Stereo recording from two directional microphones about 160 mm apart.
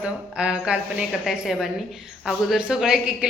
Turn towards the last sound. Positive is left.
turn(degrees=-5)  # may be behind; listen again after turning